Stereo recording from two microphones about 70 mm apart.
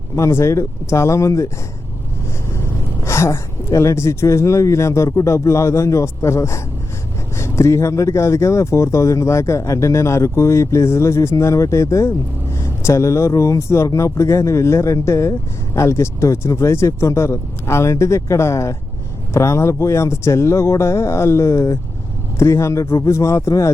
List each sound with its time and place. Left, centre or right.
0.2 s speech: left
2.5 s speech: left